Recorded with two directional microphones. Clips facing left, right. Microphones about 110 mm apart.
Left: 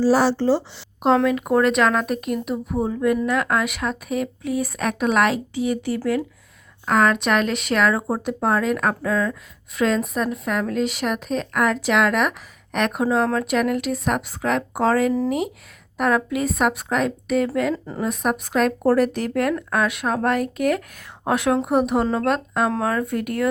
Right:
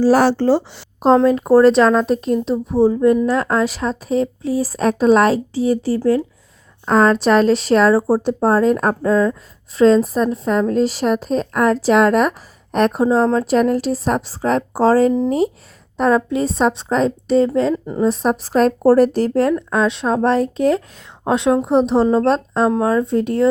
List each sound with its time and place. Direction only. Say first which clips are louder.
0.0 s speech: right 4 dB; 55° right (ahead or behind)
0.9 s a woman's voice: right 5 dB; 30° right (ahead or behind)